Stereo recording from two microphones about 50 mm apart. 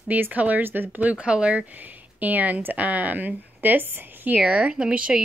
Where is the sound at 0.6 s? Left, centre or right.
Right.